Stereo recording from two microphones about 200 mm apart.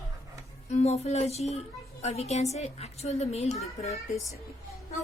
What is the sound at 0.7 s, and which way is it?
A woman's voice, 30° left (ahead or behind).